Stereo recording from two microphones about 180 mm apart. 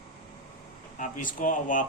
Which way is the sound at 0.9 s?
45° left (ahead or behind).